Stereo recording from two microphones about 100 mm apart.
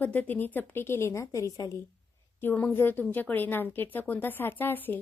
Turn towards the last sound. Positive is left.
turn(degrees=20)  # may be behind; listen again after turning